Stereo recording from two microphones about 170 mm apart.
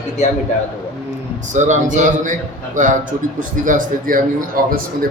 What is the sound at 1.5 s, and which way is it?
A man's voice, 45° right (ahead or behind).